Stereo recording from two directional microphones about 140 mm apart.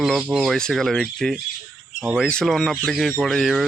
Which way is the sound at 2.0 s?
10° right (ahead or behind).